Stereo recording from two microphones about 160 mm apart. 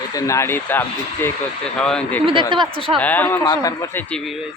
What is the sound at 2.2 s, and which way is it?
Speech, 30° right (ahead or behind).